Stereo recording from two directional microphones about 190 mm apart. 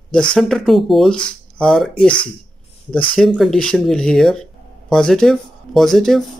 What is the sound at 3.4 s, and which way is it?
Speech, 5° left (ahead or behind).